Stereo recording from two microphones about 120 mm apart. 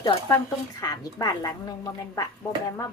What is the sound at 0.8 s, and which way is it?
Speech, 30° left (ahead or behind).